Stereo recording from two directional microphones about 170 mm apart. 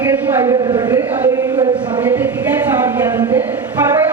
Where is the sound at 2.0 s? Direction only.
10° right (ahead or behind).